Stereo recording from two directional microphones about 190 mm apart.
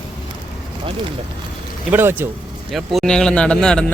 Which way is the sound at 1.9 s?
10° right (ahead or behind).